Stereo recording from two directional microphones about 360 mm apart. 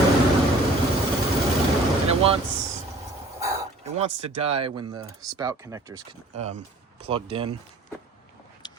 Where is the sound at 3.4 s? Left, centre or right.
Centre.